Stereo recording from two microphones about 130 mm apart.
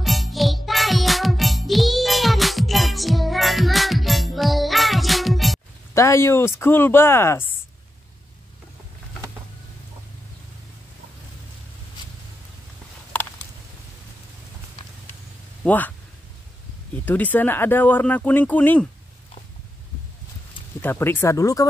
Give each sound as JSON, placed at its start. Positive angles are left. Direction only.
{"t": 0.0, "sound": "music", "side_deg": 0}
{"t": 5.9, "sound": "speech", "side_deg": 20}
{"t": 15.6, "sound": "speech", "side_deg": 15}
{"t": 16.9, "sound": "speech", "side_deg": 15}
{"t": 20.8, "sound": "speech", "side_deg": 15}